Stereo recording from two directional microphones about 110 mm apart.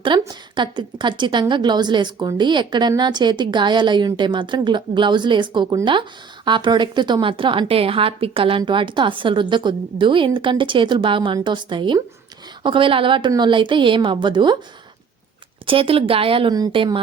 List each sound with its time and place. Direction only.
0.0 s a woman's voice: 45° right (ahead or behind)
15.6 s a woman's voice: 55° right (ahead or behind)